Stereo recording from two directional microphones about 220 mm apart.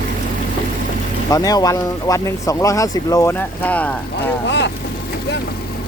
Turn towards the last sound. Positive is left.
turn(degrees=55)  # may be behind; listen again after turning